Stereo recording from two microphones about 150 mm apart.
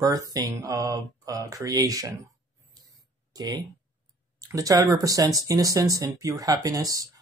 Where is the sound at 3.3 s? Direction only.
25° right (ahead or behind).